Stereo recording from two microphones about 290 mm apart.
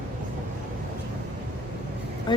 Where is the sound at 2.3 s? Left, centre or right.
Centre.